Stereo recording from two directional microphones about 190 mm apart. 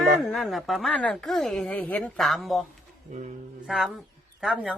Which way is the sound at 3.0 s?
40° right (ahead or behind).